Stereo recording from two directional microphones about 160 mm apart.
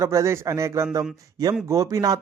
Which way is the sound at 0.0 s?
20° right (ahead or behind).